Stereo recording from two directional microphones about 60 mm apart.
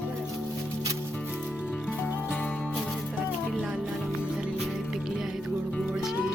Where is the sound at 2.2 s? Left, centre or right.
Left.